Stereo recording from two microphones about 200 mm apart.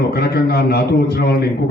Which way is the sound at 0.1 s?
55° left (ahead or behind).